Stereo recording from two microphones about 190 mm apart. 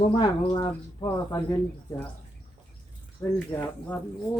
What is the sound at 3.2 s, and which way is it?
Speech, 10° left (ahead or behind).